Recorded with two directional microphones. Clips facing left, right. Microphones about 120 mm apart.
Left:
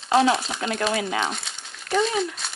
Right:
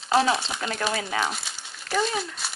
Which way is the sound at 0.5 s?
30° left (ahead or behind).